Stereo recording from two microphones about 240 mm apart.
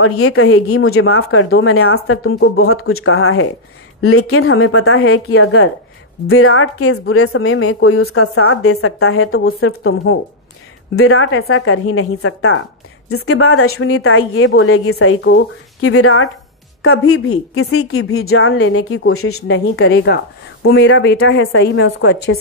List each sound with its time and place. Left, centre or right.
0.0 s speech: left
2.3 s a woman's voice: left
2.6 s speech: left
11.0 s speech: left
19.5 s a woman's voice: left